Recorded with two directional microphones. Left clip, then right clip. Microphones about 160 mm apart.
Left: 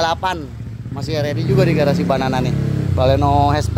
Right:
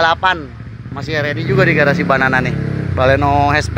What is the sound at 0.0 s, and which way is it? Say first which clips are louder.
Speech: right 5 dB; 15° left (ahead or behind).